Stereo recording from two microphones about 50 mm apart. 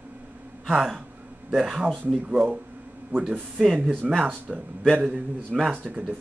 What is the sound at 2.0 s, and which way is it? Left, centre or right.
Speech, right.